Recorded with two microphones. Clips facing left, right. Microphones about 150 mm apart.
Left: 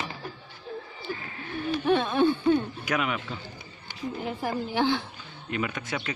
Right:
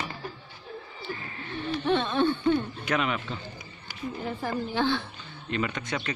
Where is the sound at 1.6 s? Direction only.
10° left (ahead or behind).